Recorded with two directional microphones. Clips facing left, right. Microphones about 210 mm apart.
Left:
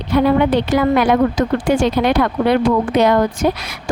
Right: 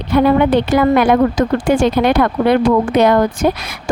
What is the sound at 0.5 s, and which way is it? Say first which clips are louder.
A woman's voice: right 2 dB; 55° right (ahead or behind).